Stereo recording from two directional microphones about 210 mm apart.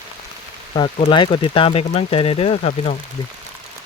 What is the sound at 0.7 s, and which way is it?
Speech, 25° left (ahead or behind).